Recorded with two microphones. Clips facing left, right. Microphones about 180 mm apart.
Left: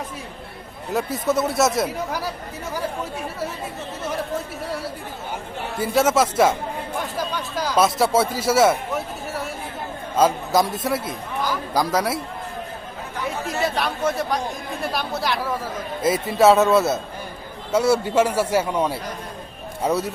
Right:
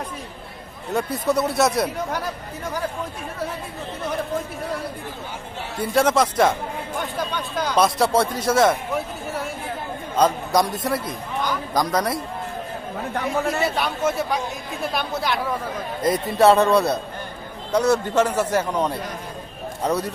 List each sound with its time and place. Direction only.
0.9 s a man's voice: centre (ahead or behind)
5.8 s a man's voice: 5° left (ahead or behind)
10.2 s a man's voice: 5° left (ahead or behind)
13.1 s speech: 60° right (ahead or behind)
13.7 s a man's voice: centre (ahead or behind)